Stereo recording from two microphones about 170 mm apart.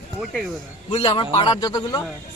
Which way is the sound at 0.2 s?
Centre (ahead or behind).